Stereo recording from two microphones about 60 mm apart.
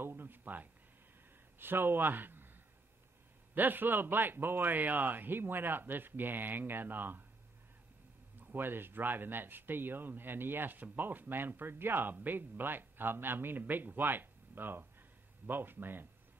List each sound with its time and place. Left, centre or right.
0.0 s a sound: right
1.6 s a man's voice: right
3.5 s speech: right
8.4 s speech: right